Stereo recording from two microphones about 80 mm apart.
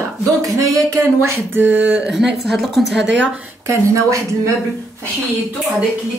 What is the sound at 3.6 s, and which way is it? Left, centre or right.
Speech, right.